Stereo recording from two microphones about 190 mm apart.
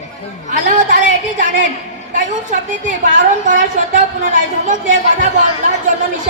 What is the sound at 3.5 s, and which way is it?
A woman's voice, 40° right (ahead or behind).